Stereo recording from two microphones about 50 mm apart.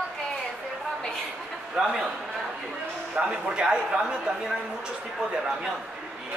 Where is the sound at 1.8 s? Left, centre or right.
Centre.